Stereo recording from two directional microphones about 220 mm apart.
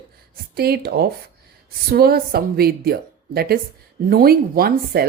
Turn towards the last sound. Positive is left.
turn(degrees=-45)  # may be behind; listen again after turning